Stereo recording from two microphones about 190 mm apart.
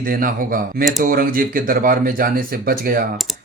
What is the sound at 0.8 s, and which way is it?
Speech, centre (ahead or behind).